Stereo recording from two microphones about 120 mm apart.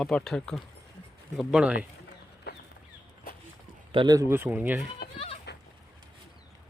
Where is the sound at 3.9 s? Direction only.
45° right (ahead or behind).